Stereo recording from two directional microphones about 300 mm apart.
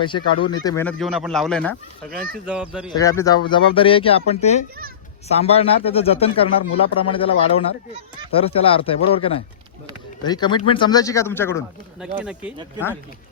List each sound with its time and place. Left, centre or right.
0.0 s speech: centre
2.0 s speech: right
2.5 s speech: centre
2.9 s speech: centre
12.1 s speech: centre